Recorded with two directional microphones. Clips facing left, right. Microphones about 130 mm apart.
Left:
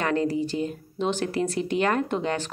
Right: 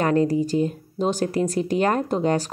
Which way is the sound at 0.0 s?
40° right (ahead or behind).